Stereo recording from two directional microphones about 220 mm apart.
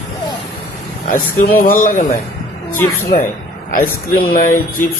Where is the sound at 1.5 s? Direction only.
40° left (ahead or behind).